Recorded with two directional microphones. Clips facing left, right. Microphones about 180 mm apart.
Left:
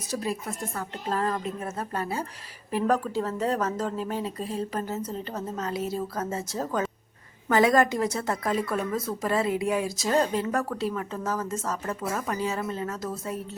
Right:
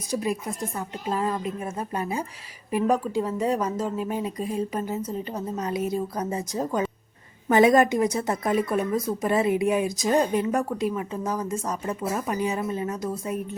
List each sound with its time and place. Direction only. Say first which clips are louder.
0.1 s a woman's voice: right 3 dB; 15° right (ahead or behind)